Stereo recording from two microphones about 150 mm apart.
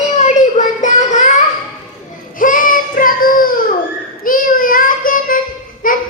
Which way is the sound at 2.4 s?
65° left (ahead or behind).